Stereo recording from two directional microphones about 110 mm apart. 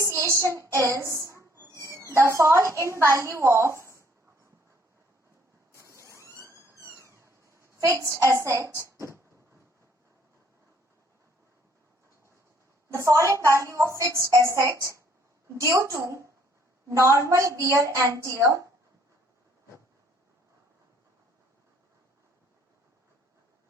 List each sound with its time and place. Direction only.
0.0 s child singing: 25° right (ahead or behind)
0.3 s a woman's voice: 25° right (ahead or behind)
0.8 s a sound: 25° right (ahead or behind)
2.1 s a woman's voice: 25° right (ahead or behind)
5.7 s mechanisms: 25° right (ahead or behind)
6.3 s a sound: 25° right (ahead or behind)
12.9 s a woman's voice: 25° right (ahead or behind)